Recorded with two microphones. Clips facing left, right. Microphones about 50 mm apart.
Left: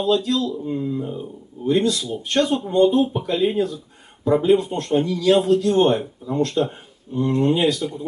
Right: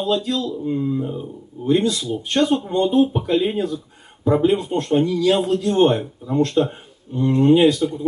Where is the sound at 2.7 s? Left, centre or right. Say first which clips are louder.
Left 2 dB; centre.